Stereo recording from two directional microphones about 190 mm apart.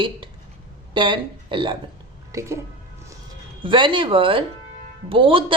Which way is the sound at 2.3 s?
15° right (ahead or behind).